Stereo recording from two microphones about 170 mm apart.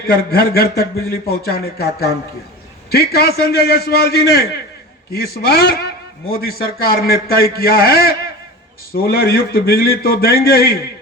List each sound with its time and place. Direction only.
0.1 s a man's voice: 65° left (ahead or behind)